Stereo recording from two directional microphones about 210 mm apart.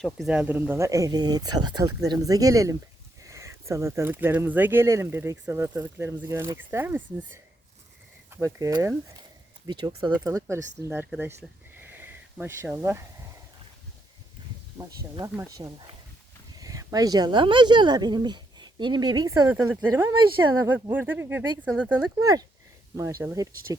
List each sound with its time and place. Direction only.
0.0 s speech: centre (ahead or behind)
8.3 s speech: 15° right (ahead or behind)
14.8 s speech: 15° right (ahead or behind)